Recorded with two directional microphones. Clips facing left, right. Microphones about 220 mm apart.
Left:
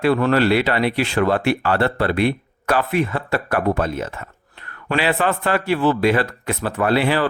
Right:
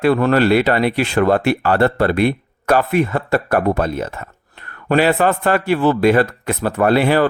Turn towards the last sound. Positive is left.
turn(degrees=-45)  # may be behind; listen again after turning